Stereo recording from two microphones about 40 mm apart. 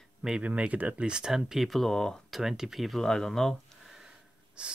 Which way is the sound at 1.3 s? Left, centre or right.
Centre.